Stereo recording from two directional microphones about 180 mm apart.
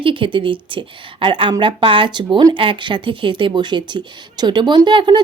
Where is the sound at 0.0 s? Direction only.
30° right (ahead or behind).